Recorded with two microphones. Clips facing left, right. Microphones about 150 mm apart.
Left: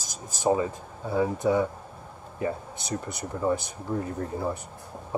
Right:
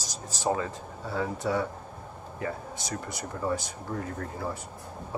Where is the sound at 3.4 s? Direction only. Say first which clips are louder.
Left 4 dB; 20° left (ahead or behind).